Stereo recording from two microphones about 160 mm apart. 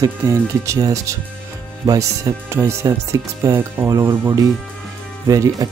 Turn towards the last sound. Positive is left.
turn(degrees=-20)  # may be behind; listen again after turning